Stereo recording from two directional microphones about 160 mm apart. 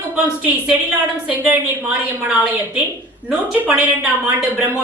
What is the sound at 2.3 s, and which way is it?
A woman's voice, 10° right (ahead or behind).